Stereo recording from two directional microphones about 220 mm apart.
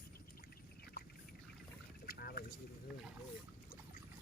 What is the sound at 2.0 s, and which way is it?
Boat, 45° left (ahead or behind).